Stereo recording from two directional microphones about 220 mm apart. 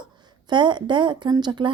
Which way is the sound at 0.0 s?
20° right (ahead or behind).